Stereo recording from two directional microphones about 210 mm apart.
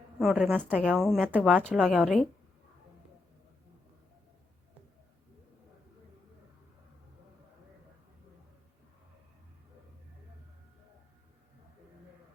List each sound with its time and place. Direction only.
0.2 s a woman's voice: centre (ahead or behind)